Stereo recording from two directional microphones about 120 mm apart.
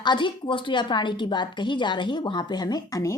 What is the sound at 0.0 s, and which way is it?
A woman's voice, 40° left (ahead or behind).